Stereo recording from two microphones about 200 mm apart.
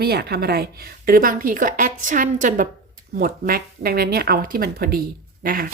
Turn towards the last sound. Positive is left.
turn(degrees=-45)  # may be behind; listen again after turning